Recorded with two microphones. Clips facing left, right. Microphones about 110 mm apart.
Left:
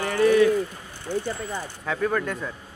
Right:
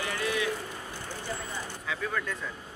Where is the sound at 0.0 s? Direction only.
45° left (ahead or behind).